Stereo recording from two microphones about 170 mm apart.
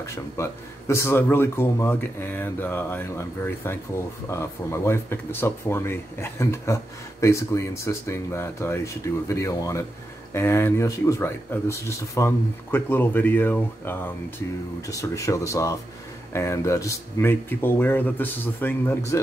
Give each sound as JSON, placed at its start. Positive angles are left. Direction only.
{"t": 0.0, "sound": "speech", "side_deg": 15}